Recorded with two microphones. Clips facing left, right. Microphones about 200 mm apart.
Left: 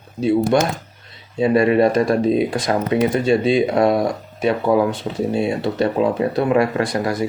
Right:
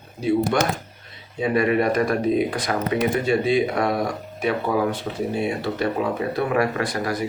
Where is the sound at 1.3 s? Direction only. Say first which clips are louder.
Left 5 dB; 30° left (ahead or behind).